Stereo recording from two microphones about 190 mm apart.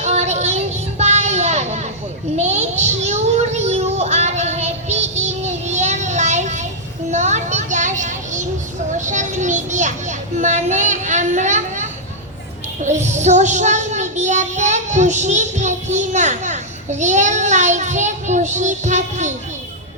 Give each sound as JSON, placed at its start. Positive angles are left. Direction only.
{"t": 0.0, "sound": "child singing", "side_deg": -35}
{"t": 2.3, "sound": "a sound", "side_deg": -35}
{"t": 9.0, "sound": "children playing", "side_deg": -40}
{"t": 12.8, "sound": "a child's voice", "side_deg": -40}